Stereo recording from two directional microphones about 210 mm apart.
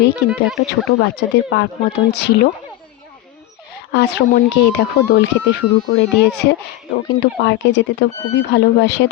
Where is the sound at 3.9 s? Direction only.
50° left (ahead or behind).